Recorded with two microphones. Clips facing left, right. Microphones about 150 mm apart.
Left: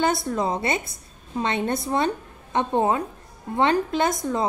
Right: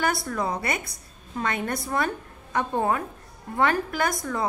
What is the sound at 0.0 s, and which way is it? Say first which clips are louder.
A woman's voice: left 3 dB; 25° left (ahead or behind).